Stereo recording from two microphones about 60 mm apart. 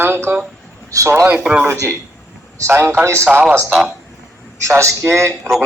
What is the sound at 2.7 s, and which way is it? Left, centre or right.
Speech, right.